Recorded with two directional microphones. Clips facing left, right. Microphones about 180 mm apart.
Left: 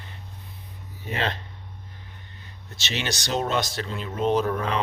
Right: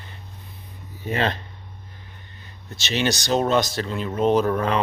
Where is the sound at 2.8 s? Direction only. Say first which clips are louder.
Right 7 dB; 40° right (ahead or behind).